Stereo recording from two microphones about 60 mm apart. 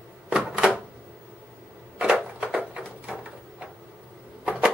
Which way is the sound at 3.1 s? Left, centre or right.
Centre.